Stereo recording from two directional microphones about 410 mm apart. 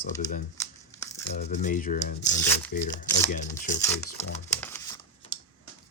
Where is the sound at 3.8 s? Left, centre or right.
Centre.